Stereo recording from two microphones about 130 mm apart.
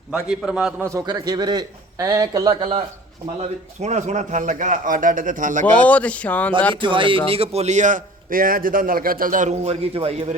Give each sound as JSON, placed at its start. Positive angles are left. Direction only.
{"t": 0.1, "sound": "a man's voice", "side_deg": -5}
{"t": 0.9, "sound": "a man's voice", "side_deg": -25}
{"t": 3.8, "sound": "a man's voice", "side_deg": -60}
{"t": 5.7, "sound": "speech", "side_deg": 10}
{"t": 6.7, "sound": "a man's voice", "side_deg": -40}